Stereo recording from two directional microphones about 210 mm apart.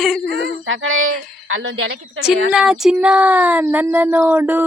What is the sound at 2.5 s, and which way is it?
Speech, 5° right (ahead or behind).